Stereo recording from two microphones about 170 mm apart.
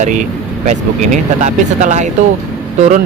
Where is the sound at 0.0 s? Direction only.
45° right (ahead or behind).